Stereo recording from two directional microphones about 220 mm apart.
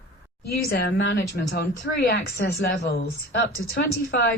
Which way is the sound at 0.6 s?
45° left (ahead or behind).